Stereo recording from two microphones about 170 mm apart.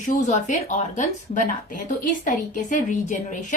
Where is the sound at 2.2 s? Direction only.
50° left (ahead or behind).